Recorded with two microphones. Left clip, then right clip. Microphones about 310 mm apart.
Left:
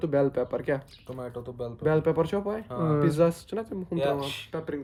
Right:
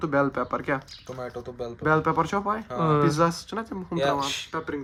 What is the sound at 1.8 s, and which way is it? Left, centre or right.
Speech, centre.